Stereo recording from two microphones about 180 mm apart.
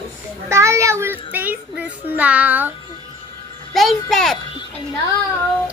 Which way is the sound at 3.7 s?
Centre (ahead or behind).